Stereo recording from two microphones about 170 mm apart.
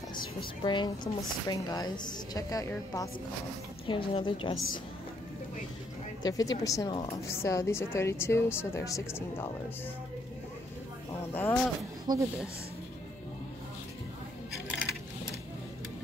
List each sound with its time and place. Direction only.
0.6 s a woman's voice: 25° left (ahead or behind)
3.8 s a woman's voice: 30° left (ahead or behind)
6.2 s a woman's voice: 20° left (ahead or behind)
11.3 s speech: 10° left (ahead or behind)
12.1 s speech: 25° right (ahead or behind)